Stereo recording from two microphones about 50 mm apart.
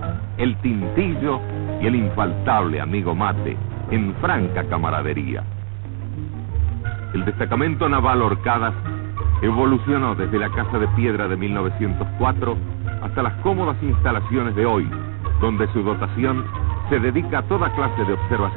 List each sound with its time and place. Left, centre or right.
0.0 s speech: left
7.2 s speech: left